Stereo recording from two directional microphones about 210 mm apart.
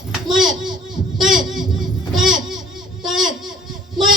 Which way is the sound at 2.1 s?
Centre (ahead or behind).